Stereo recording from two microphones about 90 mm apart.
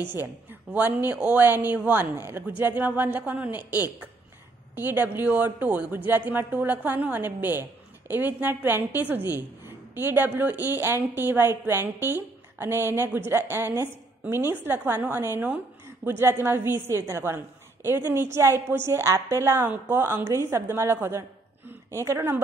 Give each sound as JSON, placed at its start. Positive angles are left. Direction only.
{"t": 0.0, "sound": "a woman's voice", "side_deg": -25}